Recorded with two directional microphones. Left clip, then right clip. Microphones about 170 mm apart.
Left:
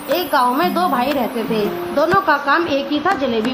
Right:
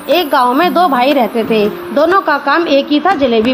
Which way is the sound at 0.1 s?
50° right (ahead or behind).